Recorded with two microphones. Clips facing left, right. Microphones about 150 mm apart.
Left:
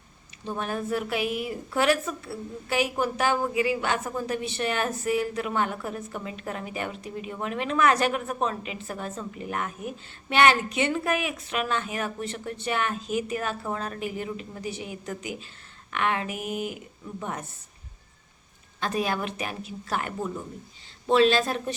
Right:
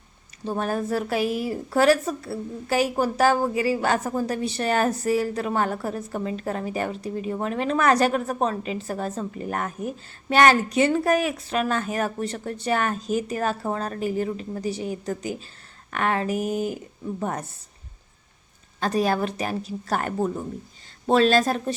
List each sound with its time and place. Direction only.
0.4 s a woman's voice: 40° right (ahead or behind)
18.8 s a woman's voice: 40° right (ahead or behind)